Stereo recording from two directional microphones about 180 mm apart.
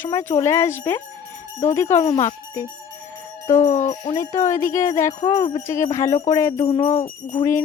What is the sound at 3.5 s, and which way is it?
Jingle bell, 40° left (ahead or behind).